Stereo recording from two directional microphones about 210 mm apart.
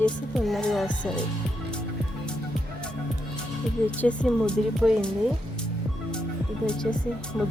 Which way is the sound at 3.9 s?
5° left (ahead or behind).